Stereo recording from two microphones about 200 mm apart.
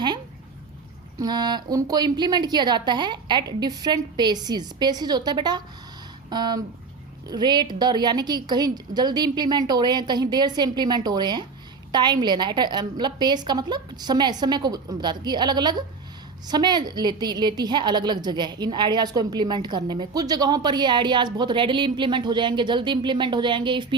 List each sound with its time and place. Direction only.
1.2 s a woman's voice: 20° right (ahead or behind)